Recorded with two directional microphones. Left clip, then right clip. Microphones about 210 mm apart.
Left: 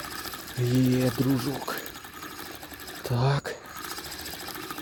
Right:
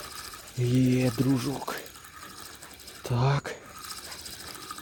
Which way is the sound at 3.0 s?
5° right (ahead or behind).